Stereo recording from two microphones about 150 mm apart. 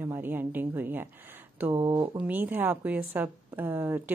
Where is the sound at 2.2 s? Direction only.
10° right (ahead or behind).